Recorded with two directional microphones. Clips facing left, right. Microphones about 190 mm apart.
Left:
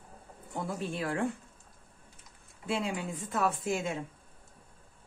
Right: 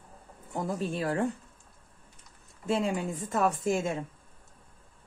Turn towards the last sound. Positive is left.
turn(degrees=-45)  # may be behind; listen again after turning